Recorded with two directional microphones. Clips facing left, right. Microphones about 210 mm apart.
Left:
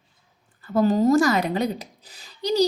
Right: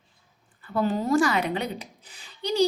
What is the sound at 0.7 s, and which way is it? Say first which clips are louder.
A woman's voice: left 5 dB; 40° left (ahead or behind).